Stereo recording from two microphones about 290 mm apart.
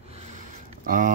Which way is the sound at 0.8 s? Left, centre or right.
Right.